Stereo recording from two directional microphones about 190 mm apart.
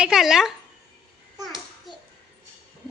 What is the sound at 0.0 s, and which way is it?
Speech, centre (ahead or behind).